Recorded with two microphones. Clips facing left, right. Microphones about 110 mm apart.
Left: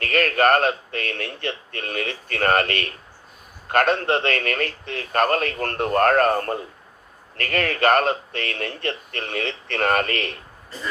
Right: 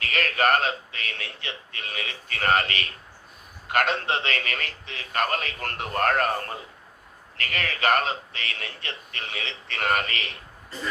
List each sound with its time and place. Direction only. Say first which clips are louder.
0.0 s a man's voice: left 5 dB; 50° left (ahead or behind)